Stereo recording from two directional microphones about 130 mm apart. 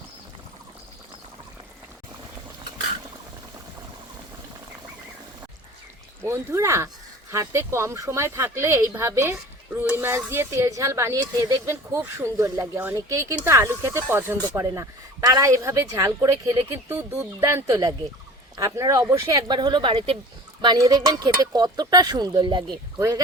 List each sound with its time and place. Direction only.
6.2 s speech: 20° right (ahead or behind)
19.5 s speech: 35° right (ahead or behind)
20.6 s speech: 30° right (ahead or behind)
23.0 s speech: 25° right (ahead or behind)